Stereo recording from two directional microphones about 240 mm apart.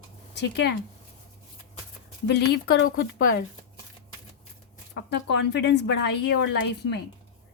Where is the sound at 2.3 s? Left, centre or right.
Left.